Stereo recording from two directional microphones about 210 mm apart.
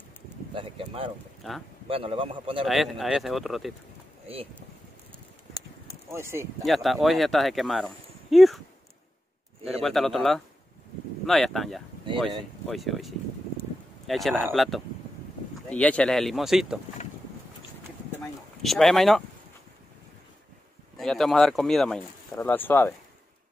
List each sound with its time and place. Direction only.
0.6 s a sound: 25° right (ahead or behind)
1.4 s speech: centre (ahead or behind)
1.9 s a man's voice: 25° right (ahead or behind)
2.6 s speech: centre (ahead or behind)
6.1 s speech: 10° right (ahead or behind)
6.6 s speech: centre (ahead or behind)
9.7 s speech: centre (ahead or behind)
18.6 s speech: centre (ahead or behind)
21.0 s speech: centre (ahead or behind)